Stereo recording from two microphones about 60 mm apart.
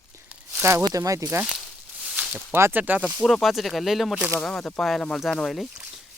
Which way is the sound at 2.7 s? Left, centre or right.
Right.